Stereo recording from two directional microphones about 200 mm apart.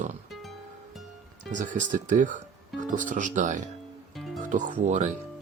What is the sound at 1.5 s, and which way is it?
Speech, 40° right (ahead or behind).